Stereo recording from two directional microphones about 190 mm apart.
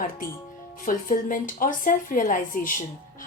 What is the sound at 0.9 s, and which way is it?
A woman's voice, 45° left (ahead or behind).